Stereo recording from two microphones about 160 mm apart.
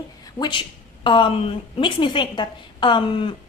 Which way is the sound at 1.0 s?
30° left (ahead or behind).